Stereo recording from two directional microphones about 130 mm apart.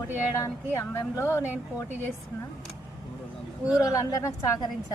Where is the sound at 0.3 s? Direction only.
20° left (ahead or behind).